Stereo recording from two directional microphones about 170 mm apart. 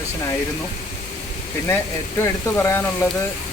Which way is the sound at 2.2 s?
15° left (ahead or behind).